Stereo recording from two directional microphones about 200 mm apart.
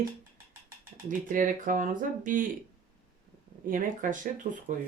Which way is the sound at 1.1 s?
40° right (ahead or behind).